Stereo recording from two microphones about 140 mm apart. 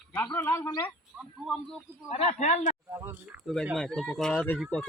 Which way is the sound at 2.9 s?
20° right (ahead or behind).